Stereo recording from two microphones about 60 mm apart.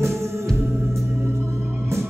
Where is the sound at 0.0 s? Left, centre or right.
Right.